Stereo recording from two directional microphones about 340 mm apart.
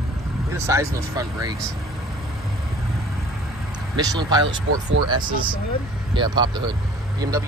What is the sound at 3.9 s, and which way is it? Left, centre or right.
Speech, centre.